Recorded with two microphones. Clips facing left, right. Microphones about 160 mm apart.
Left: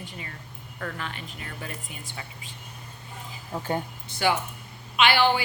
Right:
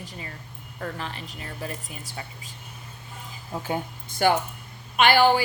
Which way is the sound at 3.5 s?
10° right (ahead or behind).